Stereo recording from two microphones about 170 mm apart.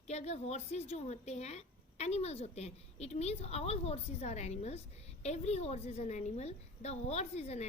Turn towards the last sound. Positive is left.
turn(degrees=40)  # may be behind; listen again after turning